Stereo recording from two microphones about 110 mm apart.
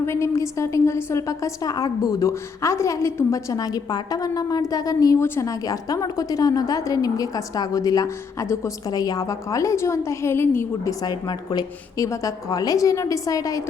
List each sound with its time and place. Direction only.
0.0 s a woman's voice: 25° left (ahead or behind)
11.0 s a woman's voice: 40° left (ahead or behind)